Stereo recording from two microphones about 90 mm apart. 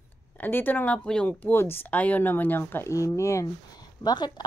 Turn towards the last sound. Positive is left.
turn(degrees=50)  # may be behind; listen again after turning